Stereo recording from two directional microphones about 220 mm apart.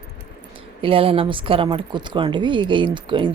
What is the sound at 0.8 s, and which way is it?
Speech, 25° right (ahead or behind).